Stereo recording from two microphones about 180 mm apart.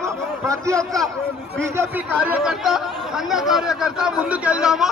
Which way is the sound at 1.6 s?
10° right (ahead or behind).